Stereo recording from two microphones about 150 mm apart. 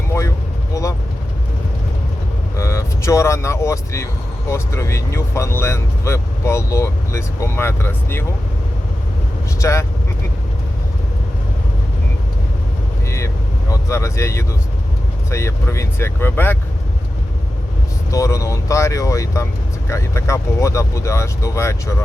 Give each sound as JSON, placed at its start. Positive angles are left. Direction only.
{"t": 0.7, "sound": "speech", "side_deg": 20}
{"t": 2.6, "sound": "speech", "side_deg": 20}
{"t": 9.6, "sound": "speech", "side_deg": 20}
{"t": 13.1, "sound": "speech", "side_deg": 20}
{"t": 18.1, "sound": "speech", "side_deg": 20}